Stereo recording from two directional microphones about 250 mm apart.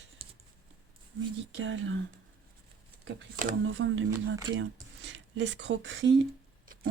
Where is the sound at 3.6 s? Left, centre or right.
Right.